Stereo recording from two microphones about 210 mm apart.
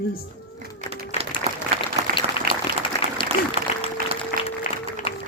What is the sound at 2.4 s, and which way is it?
Applause, 25° left (ahead or behind).